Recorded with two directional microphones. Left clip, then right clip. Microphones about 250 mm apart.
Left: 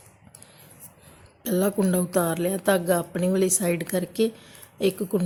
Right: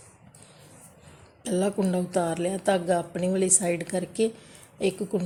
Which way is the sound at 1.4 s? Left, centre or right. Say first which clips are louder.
Left 2 dB; centre.